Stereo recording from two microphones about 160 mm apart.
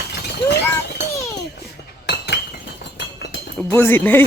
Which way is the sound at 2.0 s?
90° left.